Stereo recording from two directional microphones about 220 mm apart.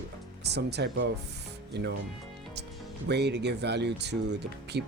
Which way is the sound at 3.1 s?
50° right (ahead or behind).